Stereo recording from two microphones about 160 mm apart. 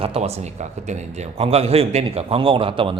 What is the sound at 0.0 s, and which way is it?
Speech, 40° right (ahead or behind).